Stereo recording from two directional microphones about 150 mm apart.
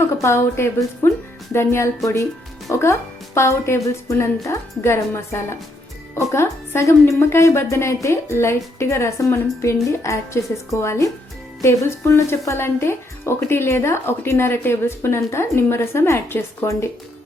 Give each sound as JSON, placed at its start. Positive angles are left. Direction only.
{"t": 0.2, "sound": "a woman's voice", "side_deg": 20}